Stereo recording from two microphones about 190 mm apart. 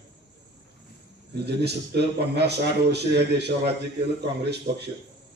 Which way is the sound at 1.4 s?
60° right (ahead or behind).